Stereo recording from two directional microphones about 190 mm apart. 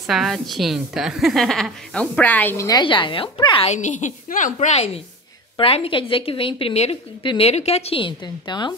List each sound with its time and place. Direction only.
0.0 s a woman's voice: centre (ahead or behind); by 3.7 s 25° left (ahead or behind)
3.7 s a woman's voice: 40° left (ahead or behind); by 8.7 s 25° left (ahead or behind)